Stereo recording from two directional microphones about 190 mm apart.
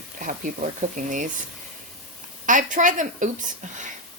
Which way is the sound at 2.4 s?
40° right (ahead or behind).